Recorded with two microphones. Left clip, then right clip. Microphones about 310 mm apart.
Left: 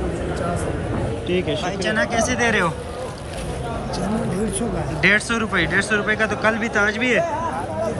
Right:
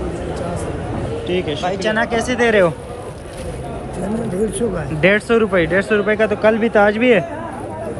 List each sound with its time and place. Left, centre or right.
0.4 s speech: centre
4.6 s speech: centre